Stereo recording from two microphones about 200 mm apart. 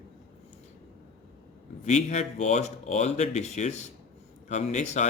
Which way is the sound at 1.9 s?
35° left (ahead or behind).